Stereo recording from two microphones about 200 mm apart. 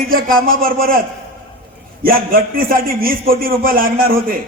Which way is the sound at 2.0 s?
45° right (ahead or behind).